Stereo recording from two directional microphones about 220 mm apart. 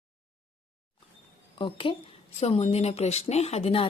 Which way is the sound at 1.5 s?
20° left (ahead or behind).